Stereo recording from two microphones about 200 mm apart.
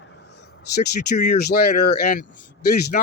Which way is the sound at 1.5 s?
55° left (ahead or behind).